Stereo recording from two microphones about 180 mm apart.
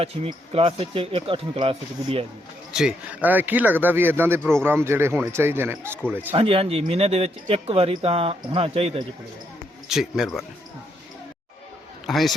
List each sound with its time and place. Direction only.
0.0 s speech: 30° right (ahead or behind)
2.7 s speech: 5° right (ahead or behind)
6.3 s speech: 30° right (ahead or behind)
9.9 s speech: centre (ahead or behind)
12.0 s speech: centre (ahead or behind)